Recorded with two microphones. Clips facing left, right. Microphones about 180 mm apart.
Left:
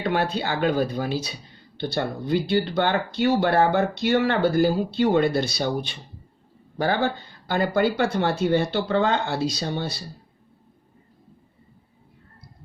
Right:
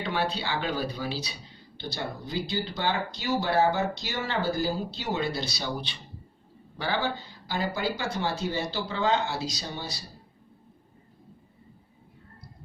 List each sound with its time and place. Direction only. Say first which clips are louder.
0.0 s speech: left 5 dB; 50° left (ahead or behind)